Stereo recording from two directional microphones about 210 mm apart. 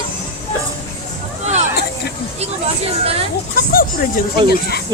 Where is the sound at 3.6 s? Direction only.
45° left (ahead or behind).